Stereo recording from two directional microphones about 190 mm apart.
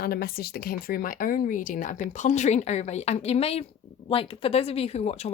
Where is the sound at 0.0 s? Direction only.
50° left (ahead or behind).